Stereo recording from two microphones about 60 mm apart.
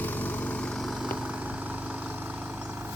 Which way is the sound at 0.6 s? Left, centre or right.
Centre.